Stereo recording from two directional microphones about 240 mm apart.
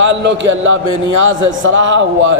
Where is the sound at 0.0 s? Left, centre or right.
Right.